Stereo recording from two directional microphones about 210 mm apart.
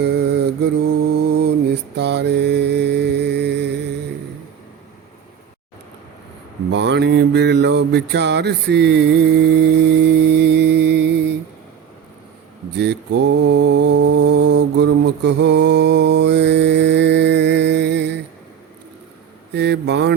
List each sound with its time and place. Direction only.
0.0 s mantra: 55° right (ahead or behind)
6.7 s mantra: 55° right (ahead or behind)
12.7 s mantra: 55° right (ahead or behind)
19.5 s speech: 55° right (ahead or behind)